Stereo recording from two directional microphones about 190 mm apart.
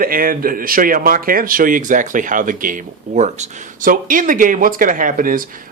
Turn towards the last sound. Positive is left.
turn(degrees=-45)  # may be behind; listen again after turning